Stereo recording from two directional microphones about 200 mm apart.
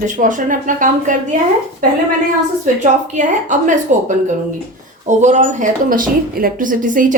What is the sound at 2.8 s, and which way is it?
Speech, 40° right (ahead or behind).